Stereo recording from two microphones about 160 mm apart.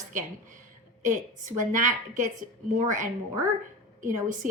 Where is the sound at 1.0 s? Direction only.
55° right (ahead or behind).